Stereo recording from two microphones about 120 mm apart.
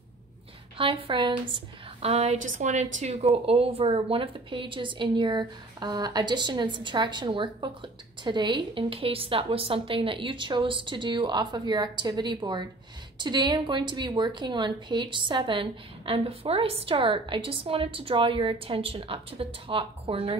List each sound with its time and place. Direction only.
0.7 s a woman's voice: 45° right (ahead or behind)